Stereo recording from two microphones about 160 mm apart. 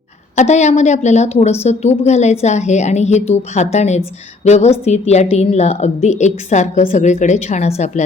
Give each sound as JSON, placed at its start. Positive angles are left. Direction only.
{"t": 0.3, "sound": "a woman's voice", "side_deg": 45}